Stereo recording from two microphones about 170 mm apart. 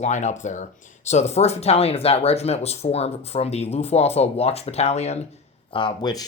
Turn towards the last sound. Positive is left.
turn(degrees=25)  # may be behind; listen again after turning